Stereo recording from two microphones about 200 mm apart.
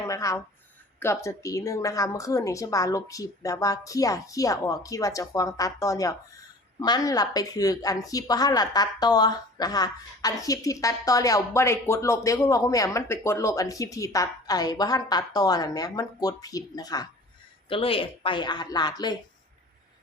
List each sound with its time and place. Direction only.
0.1 s speech: 15° left (ahead or behind)